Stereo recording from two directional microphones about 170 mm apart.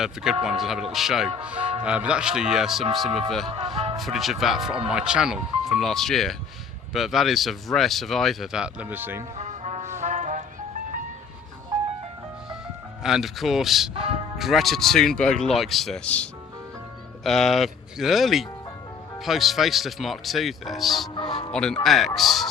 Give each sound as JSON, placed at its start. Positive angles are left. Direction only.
{"t": 0.0, "sound": "speech", "side_deg": -5}
{"t": 1.5, "sound": "speech", "side_deg": -30}
{"t": 1.8, "sound": "speech", "side_deg": -5}
{"t": 9.4, "sound": "brass instrument", "side_deg": -40}
{"t": 9.9, "sound": "music", "side_deg": -45}
{"t": 13.0, "sound": "speech", "side_deg": -5}
{"t": 13.9, "sound": "speech", "side_deg": -35}
{"t": 14.3, "sound": "speech", "side_deg": 0}
{"t": 21.2, "sound": "speech", "side_deg": 30}
{"t": 21.5, "sound": "speech", "side_deg": 5}